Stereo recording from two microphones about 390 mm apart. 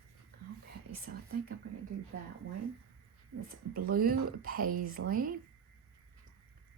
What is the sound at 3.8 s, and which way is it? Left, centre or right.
Speech, right.